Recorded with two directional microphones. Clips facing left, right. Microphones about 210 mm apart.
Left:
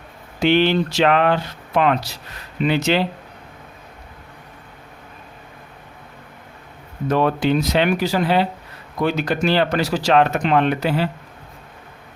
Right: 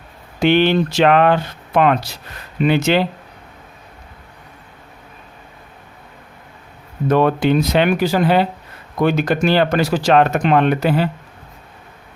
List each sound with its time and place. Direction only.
0.4 s speech: 50° right (ahead or behind)
7.1 s speech: 55° right (ahead or behind)